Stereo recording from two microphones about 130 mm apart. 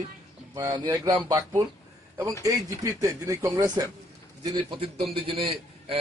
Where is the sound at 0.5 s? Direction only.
30° right (ahead or behind).